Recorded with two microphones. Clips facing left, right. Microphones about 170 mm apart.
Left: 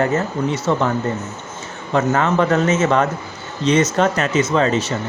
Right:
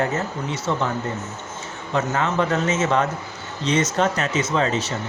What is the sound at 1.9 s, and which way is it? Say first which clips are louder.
Speech: left 5 dB; 60° left (ahead or behind).